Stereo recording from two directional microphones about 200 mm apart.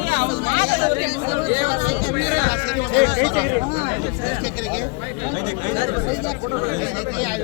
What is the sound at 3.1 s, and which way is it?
Speech, 55° right (ahead or behind).